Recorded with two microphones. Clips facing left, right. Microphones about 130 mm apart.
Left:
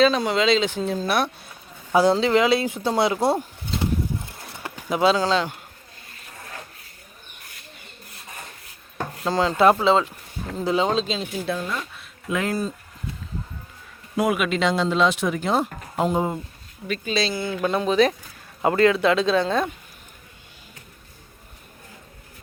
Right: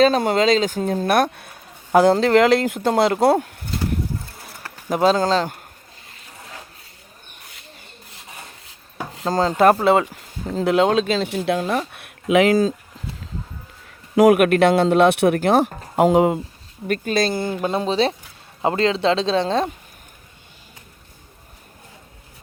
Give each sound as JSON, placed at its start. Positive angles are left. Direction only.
{"t": 0.0, "sound": "a man's voice", "side_deg": -45}
{"t": 4.9, "sound": "speech", "side_deg": -45}
{"t": 9.0, "sound": "wood", "side_deg": -5}
{"t": 9.3, "sound": "speech", "side_deg": -40}
{"t": 9.8, "sound": "a man's voice", "side_deg": -60}
{"t": 14.2, "sound": "a man's voice", "side_deg": -65}
{"t": 16.8, "sound": "speech", "side_deg": -50}
{"t": 17.5, "sound": "speech", "side_deg": -30}